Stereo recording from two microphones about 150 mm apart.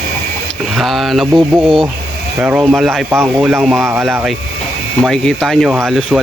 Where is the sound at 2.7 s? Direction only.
Centre (ahead or behind).